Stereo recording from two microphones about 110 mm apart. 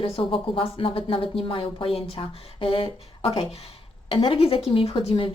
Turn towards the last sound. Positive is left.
turn(degrees=50)  # may be behind; listen again after turning